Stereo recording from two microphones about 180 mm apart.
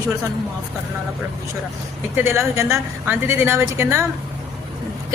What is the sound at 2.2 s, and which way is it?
A woman's voice, 15° right (ahead or behind).